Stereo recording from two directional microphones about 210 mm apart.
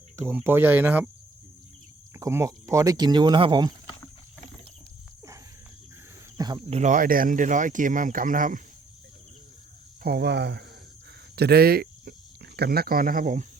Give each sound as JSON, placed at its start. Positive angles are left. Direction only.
{"t": 0.2, "sound": "speech", "side_deg": -10}
{"t": 2.1, "sound": "speech", "side_deg": -15}
{"t": 6.3, "sound": "speech", "side_deg": -20}
{"t": 10.0, "sound": "speech", "side_deg": -50}